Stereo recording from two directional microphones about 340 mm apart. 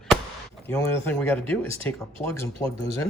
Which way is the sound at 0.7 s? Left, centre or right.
Centre.